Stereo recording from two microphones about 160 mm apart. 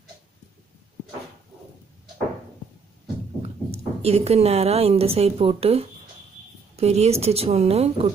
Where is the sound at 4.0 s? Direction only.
40° right (ahead or behind).